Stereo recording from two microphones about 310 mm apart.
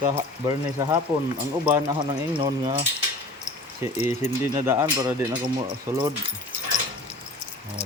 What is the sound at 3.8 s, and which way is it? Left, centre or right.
Speech, centre.